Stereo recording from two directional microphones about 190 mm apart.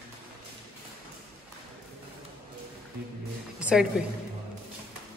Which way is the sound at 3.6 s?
5° right (ahead or behind).